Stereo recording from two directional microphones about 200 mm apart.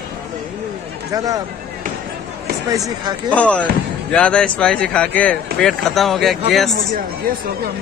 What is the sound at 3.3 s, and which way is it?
Speech, 5° left (ahead or behind).